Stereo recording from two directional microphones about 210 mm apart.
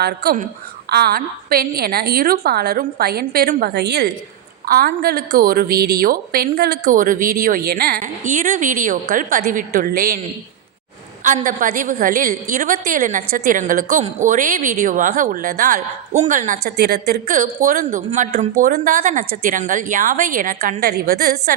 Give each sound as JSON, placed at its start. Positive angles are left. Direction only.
{"t": 0.0, "sound": "a woman's voice", "side_deg": -50}
{"t": 11.2, "sound": "a woman's voice", "side_deg": -40}